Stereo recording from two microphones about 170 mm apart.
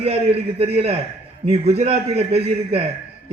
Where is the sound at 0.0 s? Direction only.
35° right (ahead or behind).